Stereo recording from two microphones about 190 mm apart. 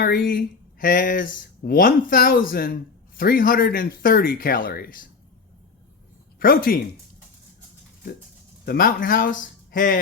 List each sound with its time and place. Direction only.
0.0 s speech: 45° left (ahead or behind)
6.4 s speech: 50° left (ahead or behind)
8.6 s speech: 55° left (ahead or behind)